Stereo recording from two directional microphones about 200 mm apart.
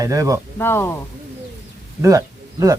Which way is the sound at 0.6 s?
10° left (ahead or behind).